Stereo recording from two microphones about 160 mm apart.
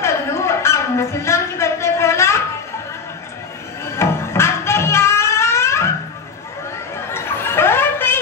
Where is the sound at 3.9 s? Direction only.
15° left (ahead or behind).